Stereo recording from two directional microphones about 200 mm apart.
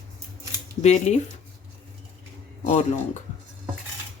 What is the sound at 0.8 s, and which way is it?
Speech, 35° left (ahead or behind).